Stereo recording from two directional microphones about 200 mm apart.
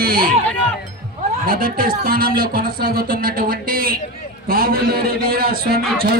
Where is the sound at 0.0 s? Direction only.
45° right (ahead or behind).